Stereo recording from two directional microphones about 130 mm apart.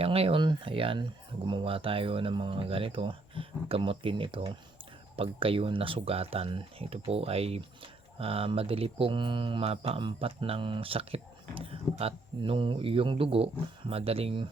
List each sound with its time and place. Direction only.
0.0 s speech: 45° right (ahead or behind)